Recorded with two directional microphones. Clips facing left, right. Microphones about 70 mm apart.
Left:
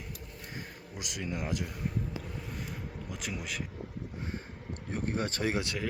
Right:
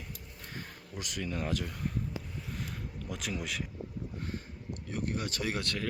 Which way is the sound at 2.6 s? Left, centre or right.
Centre.